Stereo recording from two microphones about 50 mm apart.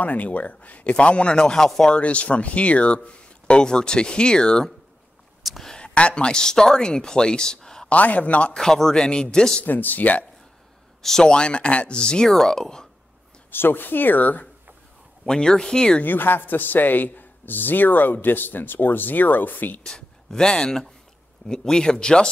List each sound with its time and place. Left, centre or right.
0.0 s speech: left; by 1.9 s centre
1.9 s speech: left
5.4 s a sound: centre
5.7 s speech: left
7.9 s speech: left
8.5 s speech: centre
9.7 s a man's voice: left
11.0 s speech: centre
11.2 s speech: centre
13.5 s a man's voice: left
15.2 s speech: centre
16.0 s a man's voice: left
19.8 s speech: centre